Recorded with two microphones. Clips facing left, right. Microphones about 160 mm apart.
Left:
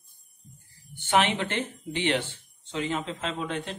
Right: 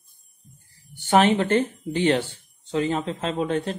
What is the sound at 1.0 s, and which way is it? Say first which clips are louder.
Speech: right 6 dB; 40° right (ahead or behind).